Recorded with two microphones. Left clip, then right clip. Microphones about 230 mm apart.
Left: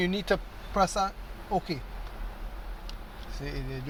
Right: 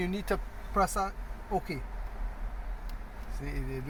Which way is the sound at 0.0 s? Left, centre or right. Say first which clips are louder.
Left 5 dB; left.